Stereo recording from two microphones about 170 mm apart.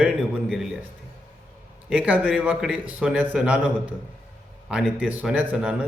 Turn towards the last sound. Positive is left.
turn(degrees=-10)  # may be behind; listen again after turning